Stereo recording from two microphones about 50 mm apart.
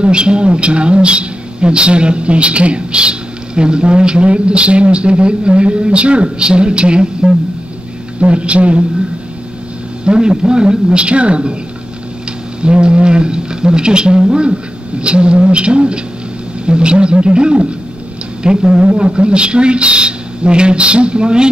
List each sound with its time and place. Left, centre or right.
0.0 s speech: right
10.0 s speech: centre
12.6 s speech: centre